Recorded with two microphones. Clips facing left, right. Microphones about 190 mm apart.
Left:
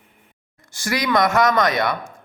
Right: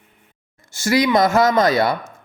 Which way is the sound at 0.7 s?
25° right (ahead or behind).